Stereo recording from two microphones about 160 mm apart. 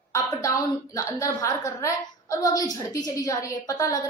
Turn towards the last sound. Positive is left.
turn(degrees=20)  # may be behind; listen again after turning